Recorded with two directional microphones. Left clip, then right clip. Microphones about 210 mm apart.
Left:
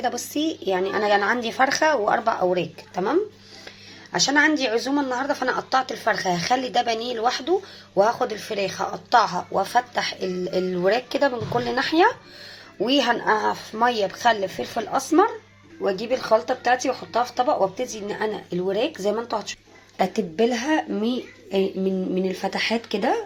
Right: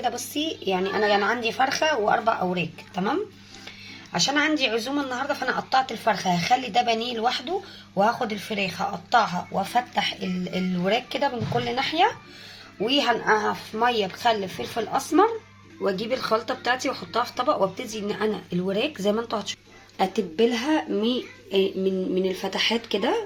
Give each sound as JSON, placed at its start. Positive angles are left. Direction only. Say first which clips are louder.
{"t": 0.0, "sound": "speech", "louder": "left 2 dB", "side_deg": 15}